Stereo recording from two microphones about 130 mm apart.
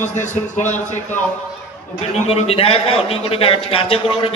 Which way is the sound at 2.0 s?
55° left (ahead or behind).